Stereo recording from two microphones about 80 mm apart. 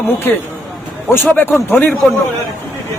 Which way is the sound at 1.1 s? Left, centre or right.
Left.